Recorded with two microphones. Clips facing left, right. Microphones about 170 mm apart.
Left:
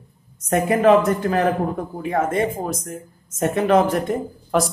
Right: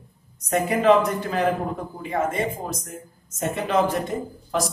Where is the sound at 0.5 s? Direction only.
50° left (ahead or behind).